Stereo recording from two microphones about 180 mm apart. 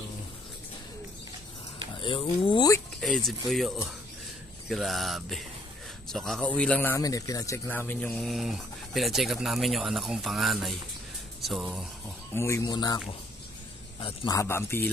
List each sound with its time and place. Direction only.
2.0 s speech: 30° left (ahead or behind)
3.0 s speech: centre (ahead or behind)
12.4 s speech: 15° left (ahead or behind)